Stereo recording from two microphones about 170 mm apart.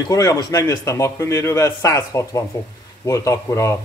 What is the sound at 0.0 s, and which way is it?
A man's voice, 20° left (ahead or behind).